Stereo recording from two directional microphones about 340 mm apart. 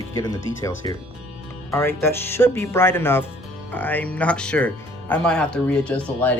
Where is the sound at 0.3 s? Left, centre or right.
Left.